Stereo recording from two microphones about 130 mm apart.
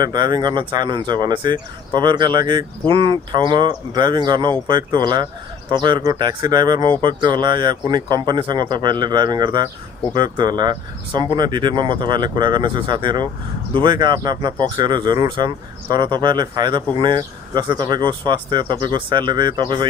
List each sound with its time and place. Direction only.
0.0 s speech: 35° right (ahead or behind)